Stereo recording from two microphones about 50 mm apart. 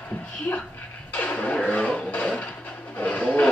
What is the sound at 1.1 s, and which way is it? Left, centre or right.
Music, left.